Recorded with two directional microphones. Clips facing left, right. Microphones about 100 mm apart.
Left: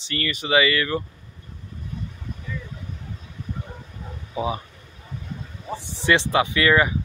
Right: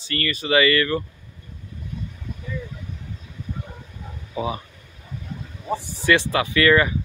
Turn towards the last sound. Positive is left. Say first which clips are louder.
# right 2 dB
turn(degrees=15)  # may be behind; listen again after turning